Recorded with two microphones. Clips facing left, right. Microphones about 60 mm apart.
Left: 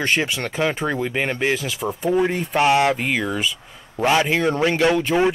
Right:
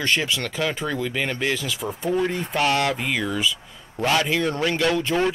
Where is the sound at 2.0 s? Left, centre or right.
Centre.